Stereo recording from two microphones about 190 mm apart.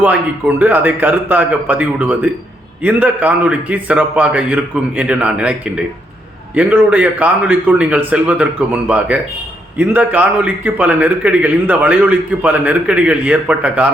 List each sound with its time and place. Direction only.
0.0 s a man's voice: 10° right (ahead or behind)